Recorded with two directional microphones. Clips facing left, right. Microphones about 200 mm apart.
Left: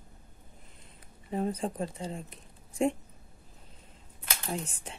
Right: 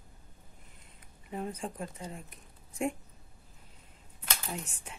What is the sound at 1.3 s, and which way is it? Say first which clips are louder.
Speech: left 6 dB; 35° left (ahead or behind).